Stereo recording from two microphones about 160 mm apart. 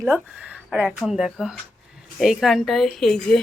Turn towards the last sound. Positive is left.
turn(degrees=5)  # may be behind; listen again after turning